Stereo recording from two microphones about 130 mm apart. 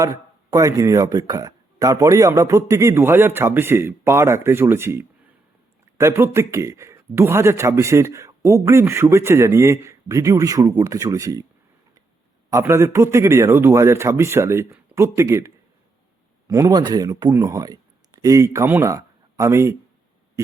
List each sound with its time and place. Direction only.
0.0 s speech: 25° right (ahead or behind)
12.5 s speech: 20° right (ahead or behind)